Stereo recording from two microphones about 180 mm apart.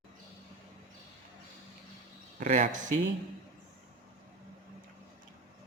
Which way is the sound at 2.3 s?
45° right (ahead or behind).